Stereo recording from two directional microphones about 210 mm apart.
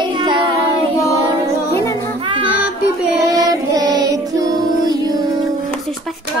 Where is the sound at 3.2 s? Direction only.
15° right (ahead or behind).